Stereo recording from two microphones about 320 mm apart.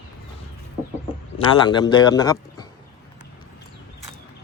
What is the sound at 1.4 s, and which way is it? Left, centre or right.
A man's voice, centre.